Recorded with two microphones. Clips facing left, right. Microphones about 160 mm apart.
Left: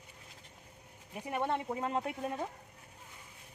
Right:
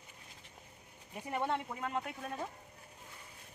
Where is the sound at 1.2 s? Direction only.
15° left (ahead or behind).